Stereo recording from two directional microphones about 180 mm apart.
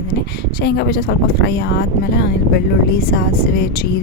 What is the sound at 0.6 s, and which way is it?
Speech, 60° left (ahead or behind).